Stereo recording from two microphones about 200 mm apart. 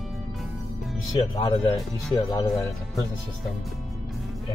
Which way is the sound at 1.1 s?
20° left (ahead or behind).